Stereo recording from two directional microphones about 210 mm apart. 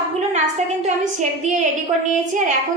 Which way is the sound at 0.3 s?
35° right (ahead or behind).